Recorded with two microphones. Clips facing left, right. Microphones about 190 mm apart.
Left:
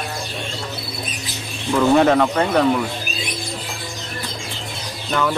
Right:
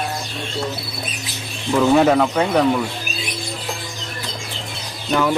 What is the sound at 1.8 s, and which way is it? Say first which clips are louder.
Speech: even; 5° right (ahead or behind).